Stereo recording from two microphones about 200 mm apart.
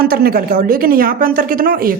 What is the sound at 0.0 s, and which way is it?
Speech, 50° right (ahead or behind).